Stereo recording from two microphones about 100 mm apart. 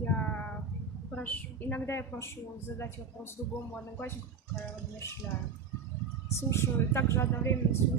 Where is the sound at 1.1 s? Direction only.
15° left (ahead or behind).